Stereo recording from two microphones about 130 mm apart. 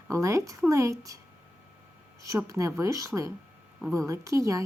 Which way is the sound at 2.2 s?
25° right (ahead or behind).